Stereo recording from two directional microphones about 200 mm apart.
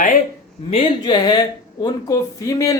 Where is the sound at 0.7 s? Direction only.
25° left (ahead or behind).